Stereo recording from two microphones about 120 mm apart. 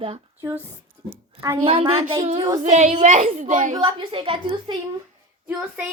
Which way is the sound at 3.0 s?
80° right.